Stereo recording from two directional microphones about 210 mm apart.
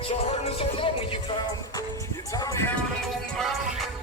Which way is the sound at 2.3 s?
15° left (ahead or behind).